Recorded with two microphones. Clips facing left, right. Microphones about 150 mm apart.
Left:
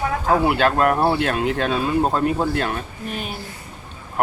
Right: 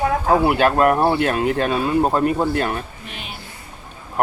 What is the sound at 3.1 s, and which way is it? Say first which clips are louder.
Speech: left 6 dB; 45° left (ahead or behind).